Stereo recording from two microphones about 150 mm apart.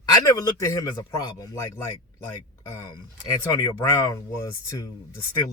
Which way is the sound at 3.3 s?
25° left (ahead or behind).